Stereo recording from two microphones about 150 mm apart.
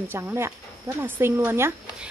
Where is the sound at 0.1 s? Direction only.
15° right (ahead or behind).